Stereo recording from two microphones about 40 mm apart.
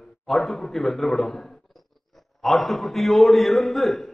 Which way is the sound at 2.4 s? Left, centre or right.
Centre.